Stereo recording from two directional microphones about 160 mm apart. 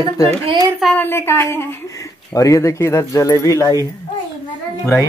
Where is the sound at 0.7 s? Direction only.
Centre (ahead or behind).